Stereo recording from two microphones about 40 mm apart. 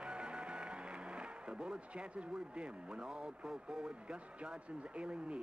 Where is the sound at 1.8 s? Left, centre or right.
Right.